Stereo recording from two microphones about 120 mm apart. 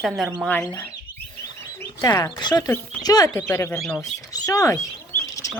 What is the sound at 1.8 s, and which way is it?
Speech, 30° left (ahead or behind).